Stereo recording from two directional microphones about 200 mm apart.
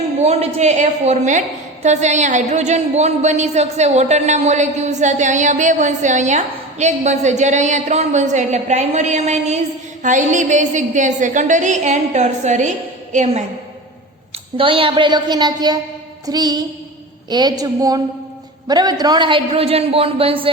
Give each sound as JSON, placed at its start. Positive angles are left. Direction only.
{"t": 0.2, "sound": "a woman's voice", "side_deg": -35}
{"t": 14.6, "sound": "a man's voice", "side_deg": -25}